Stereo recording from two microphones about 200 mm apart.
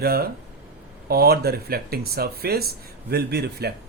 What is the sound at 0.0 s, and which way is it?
Speech, 50° right (ahead or behind).